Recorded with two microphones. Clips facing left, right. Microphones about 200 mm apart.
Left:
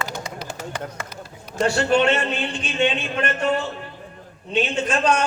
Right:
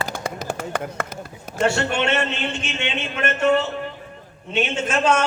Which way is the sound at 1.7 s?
25° right (ahead or behind).